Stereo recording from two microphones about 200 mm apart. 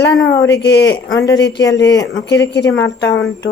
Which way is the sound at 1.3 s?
60° left (ahead or behind).